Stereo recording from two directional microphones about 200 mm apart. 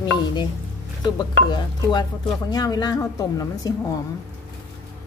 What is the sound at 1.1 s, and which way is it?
Speech, 20° left (ahead or behind).